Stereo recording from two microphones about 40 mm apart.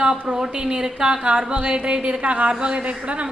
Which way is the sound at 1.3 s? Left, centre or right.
Right.